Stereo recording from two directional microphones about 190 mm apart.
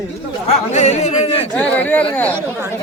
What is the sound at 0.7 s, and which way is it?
Speech, 35° left (ahead or behind).